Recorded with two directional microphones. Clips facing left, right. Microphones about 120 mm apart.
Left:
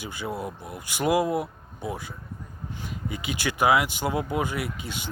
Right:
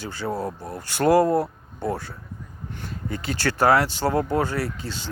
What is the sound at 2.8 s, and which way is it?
Speech, 10° left (ahead or behind).